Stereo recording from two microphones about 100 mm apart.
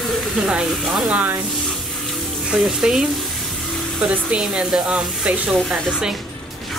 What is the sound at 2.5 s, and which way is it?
Speech, 5° right (ahead or behind).